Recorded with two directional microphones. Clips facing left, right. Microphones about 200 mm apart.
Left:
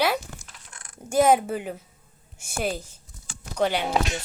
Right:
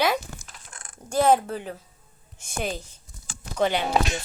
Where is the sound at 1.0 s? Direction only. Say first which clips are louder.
Left 1 dB; 10° left (ahead or behind).